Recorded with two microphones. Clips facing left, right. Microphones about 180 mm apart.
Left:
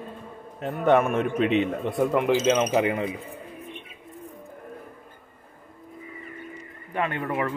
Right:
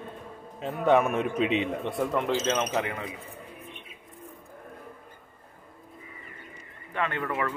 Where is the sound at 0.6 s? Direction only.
Centre (ahead or behind); by 3.0 s 20° left (ahead or behind).